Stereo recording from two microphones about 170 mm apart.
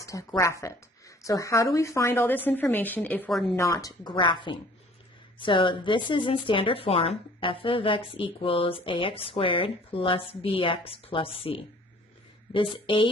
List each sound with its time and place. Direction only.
0.0 s speech: 20° left (ahead or behind)
3.5 s a woman's voice: 20° left (ahead or behind)
12.7 s a woman's voice: 30° left (ahead or behind)